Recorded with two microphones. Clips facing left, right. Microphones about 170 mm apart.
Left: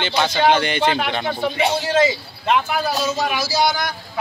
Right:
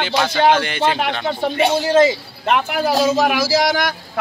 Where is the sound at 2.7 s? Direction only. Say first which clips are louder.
Right 5 dB; 90° right.